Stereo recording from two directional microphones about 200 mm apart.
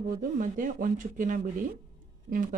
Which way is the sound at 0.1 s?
45° right (ahead or behind).